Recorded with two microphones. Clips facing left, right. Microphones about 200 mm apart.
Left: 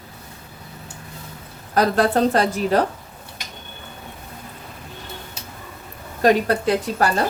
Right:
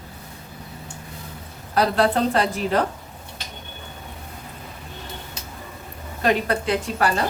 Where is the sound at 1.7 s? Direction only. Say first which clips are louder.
Left 2 dB; 45° left (ahead or behind).